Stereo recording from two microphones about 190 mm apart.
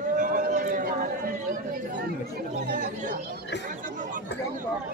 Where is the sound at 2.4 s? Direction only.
50° right (ahead or behind).